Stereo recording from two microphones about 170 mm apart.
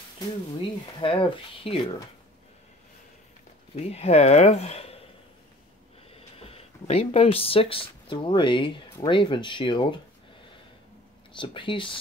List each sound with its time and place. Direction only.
0.6 s speech: 30° left (ahead or behind)
3.7 s speech: 40° left (ahead or behind)
6.1 s speech: 35° left (ahead or behind)
11.3 s speech: 30° left (ahead or behind)